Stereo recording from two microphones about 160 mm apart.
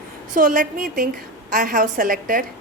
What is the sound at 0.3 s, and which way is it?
A woman's voice, 55° right (ahead or behind).